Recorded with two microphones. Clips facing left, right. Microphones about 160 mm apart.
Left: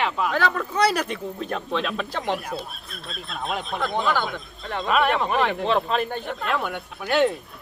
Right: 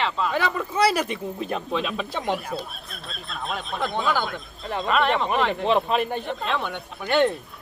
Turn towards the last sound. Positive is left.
turn(degrees=5)  # may be behind; listen again after turning